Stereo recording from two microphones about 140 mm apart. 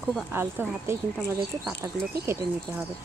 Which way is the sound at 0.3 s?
15° right (ahead or behind).